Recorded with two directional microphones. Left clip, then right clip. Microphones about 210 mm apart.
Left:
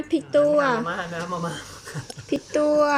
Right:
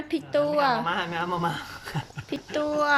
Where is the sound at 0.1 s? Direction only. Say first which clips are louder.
Left 6 dB; 5° right (ahead or behind).